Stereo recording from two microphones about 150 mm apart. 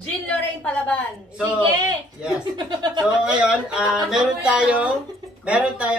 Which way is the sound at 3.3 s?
5° right (ahead or behind).